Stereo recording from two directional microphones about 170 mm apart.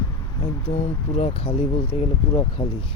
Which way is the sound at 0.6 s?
40° left (ahead or behind).